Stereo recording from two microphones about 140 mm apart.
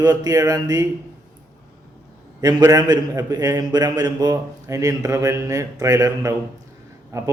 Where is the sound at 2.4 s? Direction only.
30° right (ahead or behind).